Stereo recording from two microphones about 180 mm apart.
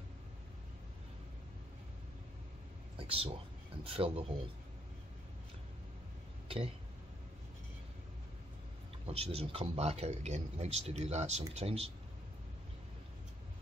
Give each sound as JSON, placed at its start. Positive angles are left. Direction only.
{"t": 3.0, "sound": "speech", "side_deg": -30}
{"t": 9.0, "sound": "speech", "side_deg": -35}